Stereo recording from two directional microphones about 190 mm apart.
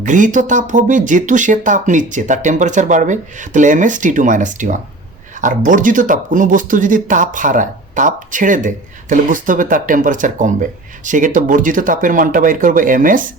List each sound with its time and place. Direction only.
0.0 s speech: 40° right (ahead or behind)